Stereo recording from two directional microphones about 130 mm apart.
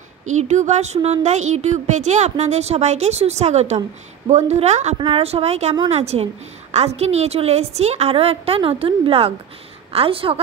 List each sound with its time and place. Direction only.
0.2 s speech: 65° right (ahead or behind)
5.0 s a woman's voice: 45° right (ahead or behind)